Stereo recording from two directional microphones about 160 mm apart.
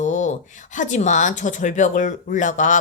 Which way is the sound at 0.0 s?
50° left (ahead or behind).